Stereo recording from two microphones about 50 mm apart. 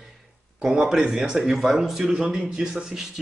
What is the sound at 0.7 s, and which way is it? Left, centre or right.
Speech, centre.